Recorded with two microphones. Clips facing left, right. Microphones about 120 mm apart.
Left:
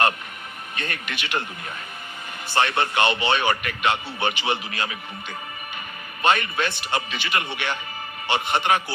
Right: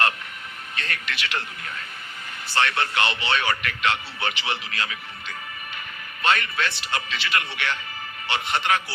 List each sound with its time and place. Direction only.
0.8 s a man's voice: 20° left (ahead or behind)
6.2 s a man's voice: 20° left (ahead or behind)